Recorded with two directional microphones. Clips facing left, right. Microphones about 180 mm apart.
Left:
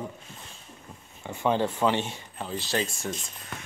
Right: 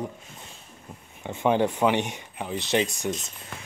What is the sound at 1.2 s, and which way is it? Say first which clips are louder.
Speech: right 3 dB; 20° right (ahead or behind).